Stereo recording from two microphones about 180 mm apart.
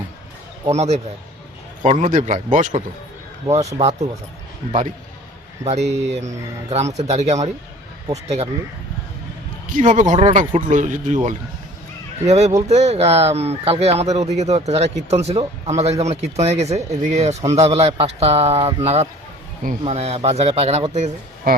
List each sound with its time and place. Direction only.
0.7 s a man's voice: 40° right (ahead or behind)
3.8 s a man's voice: 35° right (ahead or behind)
5.9 s a man's voice: 40° right (ahead or behind)
9.7 s a man's voice: 45° right (ahead or behind)